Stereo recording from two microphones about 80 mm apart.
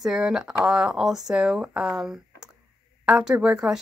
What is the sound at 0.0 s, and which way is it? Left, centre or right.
A woman's voice, centre.